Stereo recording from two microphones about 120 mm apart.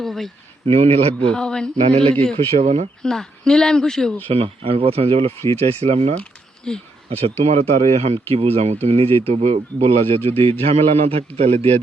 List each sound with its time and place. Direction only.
0.0 s speech: centre (ahead or behind)
0.6 s speech: 55° right (ahead or behind)
1.3 s speech: 5° left (ahead or behind)
1.8 s speech: 50° right (ahead or behind)
2.6 s speech: 65° right (ahead or behind)
3.0 s speech: 5° left (ahead or behind)
4.3 s speech: 50° right (ahead or behind)
6.7 s speech: 5° left (ahead or behind)
7.1 s speech: 60° right (ahead or behind)